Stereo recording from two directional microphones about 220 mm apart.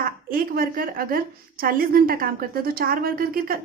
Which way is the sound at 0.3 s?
40° right (ahead or behind).